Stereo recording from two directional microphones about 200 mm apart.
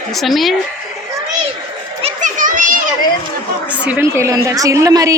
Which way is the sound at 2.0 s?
35° right (ahead or behind).